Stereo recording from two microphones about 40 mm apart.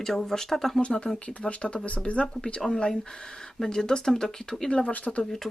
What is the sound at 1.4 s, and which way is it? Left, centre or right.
Speech, left.